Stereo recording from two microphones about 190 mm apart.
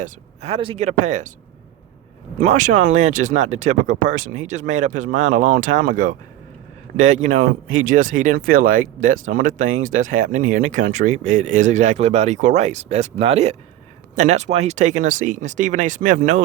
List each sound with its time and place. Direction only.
0.0 s speech: 30° right (ahead or behind)
2.4 s speech: 40° right (ahead or behind)
9.6 s speech: 90° right
9.8 s speech: 45° right (ahead or behind)